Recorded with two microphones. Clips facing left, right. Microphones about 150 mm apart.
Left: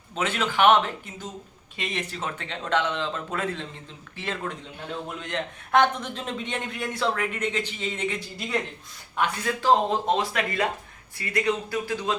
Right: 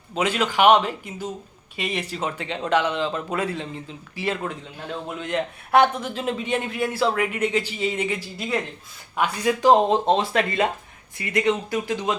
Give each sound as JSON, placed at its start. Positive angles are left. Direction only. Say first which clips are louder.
{"t": 0.1, "sound": "a man's voice", "louder": "right 4 dB", "side_deg": -10}